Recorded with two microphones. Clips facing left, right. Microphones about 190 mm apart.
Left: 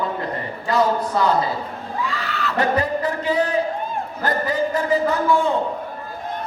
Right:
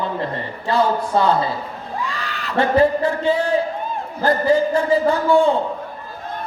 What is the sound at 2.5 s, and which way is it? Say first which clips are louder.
Speech: right 6 dB; 30° right (ahead or behind).